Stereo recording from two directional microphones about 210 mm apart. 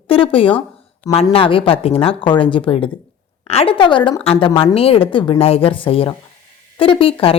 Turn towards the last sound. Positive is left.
turn(degrees=25)  # may be behind; listen again after turning